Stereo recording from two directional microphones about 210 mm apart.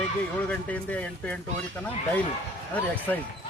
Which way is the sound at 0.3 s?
5° left (ahead or behind).